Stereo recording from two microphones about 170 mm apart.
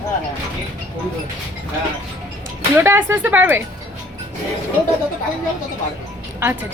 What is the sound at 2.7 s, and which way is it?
Speech, 15° right (ahead or behind).